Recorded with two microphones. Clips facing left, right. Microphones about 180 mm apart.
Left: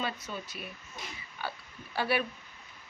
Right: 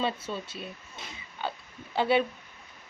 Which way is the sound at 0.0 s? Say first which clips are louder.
Right 5 dB; 30° right (ahead or behind).